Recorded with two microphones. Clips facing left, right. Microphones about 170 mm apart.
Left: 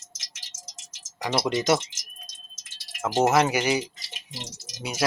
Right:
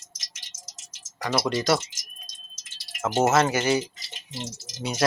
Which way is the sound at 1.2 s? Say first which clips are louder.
Even; 20° left (ahead or behind).